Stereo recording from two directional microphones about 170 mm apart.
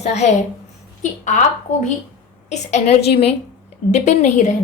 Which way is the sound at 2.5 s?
40° left (ahead or behind).